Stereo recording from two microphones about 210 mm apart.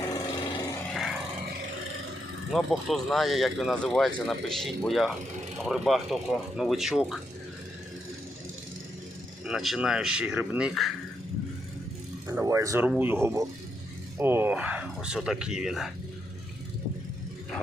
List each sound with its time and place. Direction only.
0.1 s a sound: 15° left (ahead or behind)
2.5 s speech: centre (ahead or behind)
9.5 s speech: centre (ahead or behind)
12.3 s speech: 15° right (ahead or behind)